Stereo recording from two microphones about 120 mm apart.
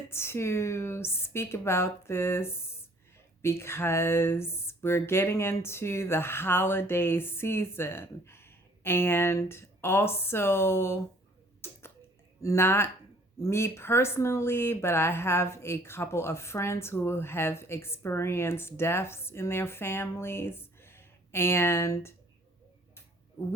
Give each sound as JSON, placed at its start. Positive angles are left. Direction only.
{"t": 0.1, "sound": "speech", "side_deg": 20}
{"t": 11.6, "sound": "tick-tock", "side_deg": 20}
{"t": 12.4, "sound": "speech", "side_deg": 25}